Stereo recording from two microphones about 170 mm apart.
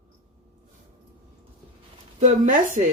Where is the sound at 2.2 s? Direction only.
50° right (ahead or behind).